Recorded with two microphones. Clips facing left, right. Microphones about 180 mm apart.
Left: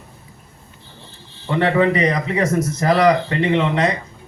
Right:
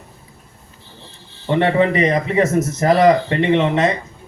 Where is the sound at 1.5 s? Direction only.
25° right (ahead or behind).